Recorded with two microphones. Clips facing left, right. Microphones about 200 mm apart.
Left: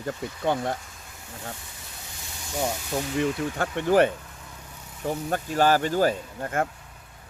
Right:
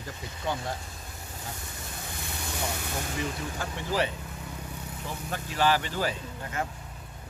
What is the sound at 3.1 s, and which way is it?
Speech, 60° left (ahead or behind).